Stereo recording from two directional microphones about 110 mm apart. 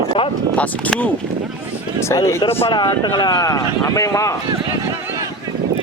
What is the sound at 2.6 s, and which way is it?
Speech, 45° left (ahead or behind).